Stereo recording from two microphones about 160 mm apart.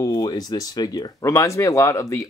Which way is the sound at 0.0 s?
25° left (ahead or behind).